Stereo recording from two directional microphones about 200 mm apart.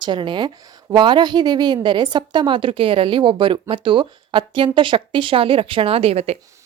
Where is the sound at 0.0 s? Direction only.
25° right (ahead or behind).